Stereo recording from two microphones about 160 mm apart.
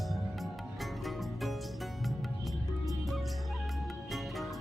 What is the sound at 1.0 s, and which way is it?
Music, centre (ahead or behind).